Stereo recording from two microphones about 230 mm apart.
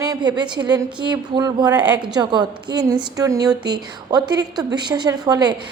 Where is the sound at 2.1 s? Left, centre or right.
Centre.